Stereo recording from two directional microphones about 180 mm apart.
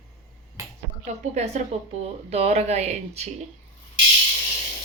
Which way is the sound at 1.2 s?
40° right (ahead or behind).